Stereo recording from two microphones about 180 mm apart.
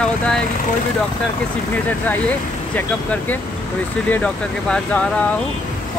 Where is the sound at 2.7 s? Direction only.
10° left (ahead or behind).